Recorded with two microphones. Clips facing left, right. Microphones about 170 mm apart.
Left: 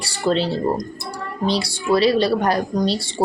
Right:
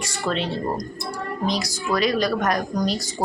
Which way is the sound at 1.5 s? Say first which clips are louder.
Left 7 dB; 30° left (ahead or behind).